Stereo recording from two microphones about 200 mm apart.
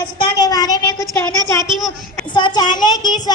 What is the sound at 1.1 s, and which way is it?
A woman's voice, 15° left (ahead or behind).